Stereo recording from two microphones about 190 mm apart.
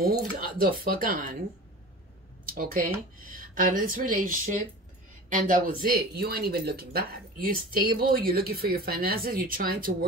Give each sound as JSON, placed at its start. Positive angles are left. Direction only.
{"t": 0.4, "sound": "speech", "side_deg": -50}
{"t": 2.5, "sound": "speech", "side_deg": -45}